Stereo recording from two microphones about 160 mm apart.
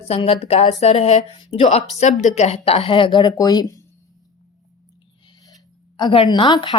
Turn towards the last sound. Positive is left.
turn(degrees=30)  # may be behind; listen again after turning